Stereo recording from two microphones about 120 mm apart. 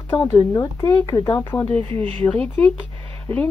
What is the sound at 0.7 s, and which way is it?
Speech, 25° left (ahead or behind).